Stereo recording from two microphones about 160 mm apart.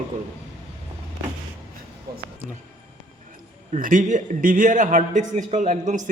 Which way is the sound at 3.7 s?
55° right (ahead or behind).